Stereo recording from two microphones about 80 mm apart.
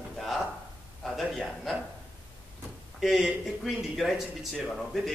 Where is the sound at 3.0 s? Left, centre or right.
Centre.